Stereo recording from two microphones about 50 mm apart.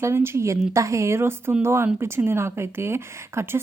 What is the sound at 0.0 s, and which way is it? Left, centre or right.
Speech, right.